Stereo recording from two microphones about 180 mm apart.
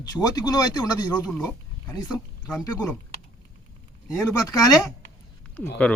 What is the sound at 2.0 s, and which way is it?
Speech, centre (ahead or behind).